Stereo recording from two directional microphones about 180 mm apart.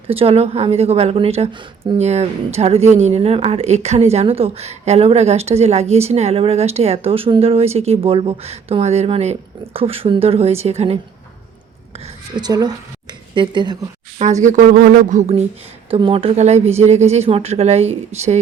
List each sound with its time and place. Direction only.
0.1 s a woman's voice: 30° right (ahead or behind)
12.4 s speech: 20° right (ahead or behind)
14.2 s a woman's voice: 40° right (ahead or behind)